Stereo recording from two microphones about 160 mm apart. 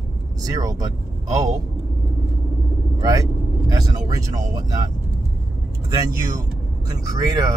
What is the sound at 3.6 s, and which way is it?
Speech, 25° right (ahead or behind).